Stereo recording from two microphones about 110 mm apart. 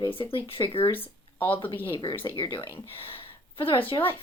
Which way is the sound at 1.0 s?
15° left (ahead or behind).